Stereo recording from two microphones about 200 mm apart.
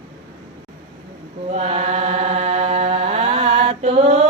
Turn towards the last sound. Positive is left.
turn(degrees=-30)  # may be behind; listen again after turning